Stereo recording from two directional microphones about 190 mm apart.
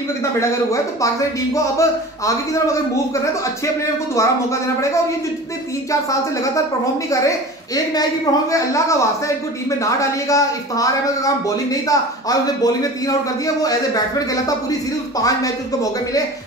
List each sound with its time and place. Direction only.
1.0 s speech: 15° left (ahead or behind)
5.9 s speech: 15° left (ahead or behind)